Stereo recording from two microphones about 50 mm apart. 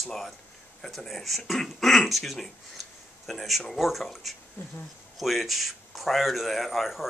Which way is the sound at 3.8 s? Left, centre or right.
Centre.